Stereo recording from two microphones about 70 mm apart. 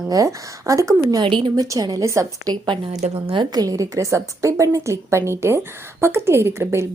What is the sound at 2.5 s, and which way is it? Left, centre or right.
A woman's voice, right.